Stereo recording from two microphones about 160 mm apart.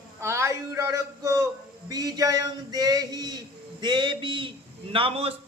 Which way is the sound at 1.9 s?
25° right (ahead or behind).